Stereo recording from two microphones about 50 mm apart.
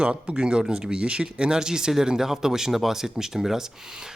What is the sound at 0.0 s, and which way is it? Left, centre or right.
Speech, centre.